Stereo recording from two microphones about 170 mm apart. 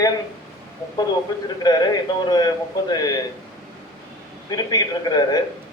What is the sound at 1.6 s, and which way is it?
A man's voice, 25° left (ahead or behind).